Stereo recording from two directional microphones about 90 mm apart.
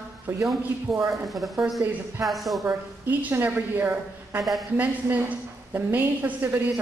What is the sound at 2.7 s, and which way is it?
A woman's voice, 20° right (ahead or behind).